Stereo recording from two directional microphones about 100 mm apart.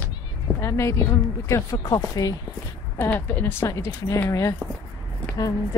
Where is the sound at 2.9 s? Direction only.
20° left (ahead or behind).